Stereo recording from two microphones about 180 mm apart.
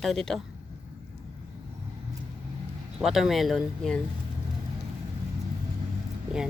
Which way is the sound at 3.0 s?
Centre (ahead or behind).